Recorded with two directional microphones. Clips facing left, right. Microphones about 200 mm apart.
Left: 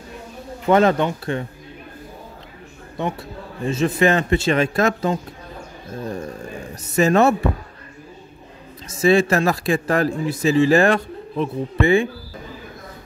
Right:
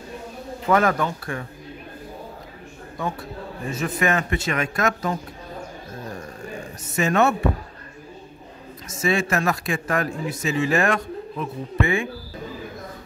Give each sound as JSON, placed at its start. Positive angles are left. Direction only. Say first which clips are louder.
{"t": 0.7, "sound": "a man's voice", "louder": "left 4 dB", "side_deg": 25}
{"t": 3.0, "sound": "a man's voice", "louder": "left 3 dB", "side_deg": 25}
{"t": 6.8, "sound": "a man's voice", "louder": "left 5 dB", "side_deg": 35}
{"t": 8.8, "sound": "a man's voice", "louder": "left 7 dB", "side_deg": 35}